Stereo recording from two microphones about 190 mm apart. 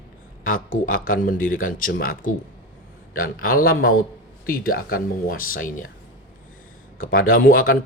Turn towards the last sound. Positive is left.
turn(degrees=50)  # may be behind; listen again after turning